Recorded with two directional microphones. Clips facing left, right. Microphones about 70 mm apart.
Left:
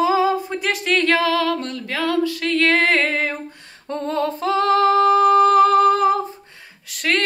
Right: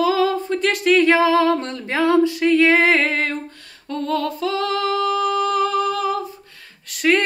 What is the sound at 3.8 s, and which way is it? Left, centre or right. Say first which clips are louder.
Female singing: even; left.